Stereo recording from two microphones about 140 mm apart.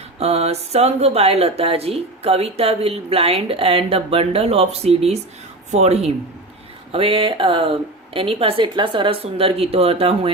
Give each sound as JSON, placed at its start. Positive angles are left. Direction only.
{"t": 0.2, "sound": "a woman's voice", "side_deg": -45}